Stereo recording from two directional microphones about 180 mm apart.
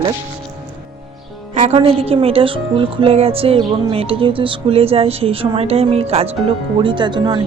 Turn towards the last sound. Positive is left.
turn(degrees=-25)  # may be behind; listen again after turning